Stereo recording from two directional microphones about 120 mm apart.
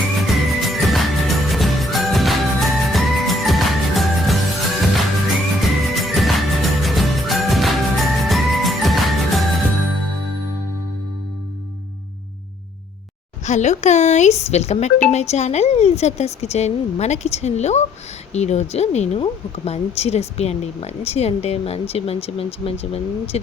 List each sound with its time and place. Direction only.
0.3 s music: centre (ahead or behind)
13.4 s speech: 75° left (ahead or behind); by 23.4 s 55° left (ahead or behind)